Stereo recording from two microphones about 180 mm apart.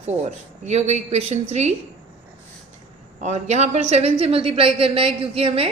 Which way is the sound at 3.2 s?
40° right (ahead or behind).